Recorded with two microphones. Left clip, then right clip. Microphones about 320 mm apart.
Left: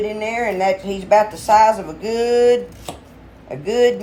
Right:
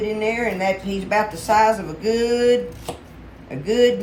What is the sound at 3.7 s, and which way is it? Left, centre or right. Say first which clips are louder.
Speech: left 1 dB; centre.